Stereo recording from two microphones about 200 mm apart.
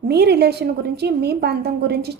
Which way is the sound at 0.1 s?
55° right (ahead or behind).